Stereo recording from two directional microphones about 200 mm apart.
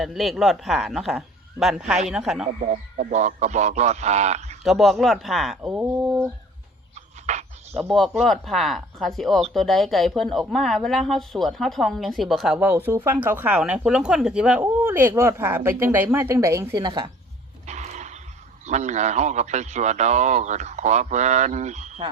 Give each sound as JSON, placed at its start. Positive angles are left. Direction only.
{"t": 0.0, "sound": "speech", "side_deg": 0}
{"t": 2.6, "sound": "speech", "side_deg": -35}
{"t": 4.6, "sound": "speech", "side_deg": 0}
{"t": 6.9, "sound": "a sound", "side_deg": -35}
{"t": 7.9, "sound": "speech", "side_deg": 0}
{"t": 17.7, "sound": "dog", "side_deg": -35}
{"t": 18.6, "sound": "speech", "side_deg": -35}